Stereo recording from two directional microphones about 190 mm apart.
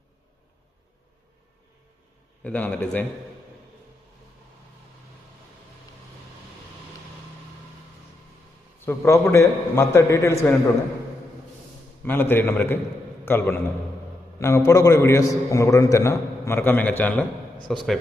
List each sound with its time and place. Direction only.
2.4 s a man's voice: 5° left (ahead or behind)
8.8 s a man's voice: 15° left (ahead or behind)
12.0 s a man's voice: 10° left (ahead or behind)